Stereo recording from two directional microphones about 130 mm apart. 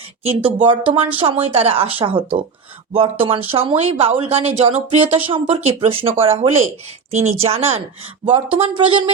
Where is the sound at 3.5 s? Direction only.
45° right (ahead or behind).